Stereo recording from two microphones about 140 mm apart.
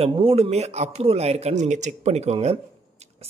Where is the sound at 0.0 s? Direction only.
45° right (ahead or behind).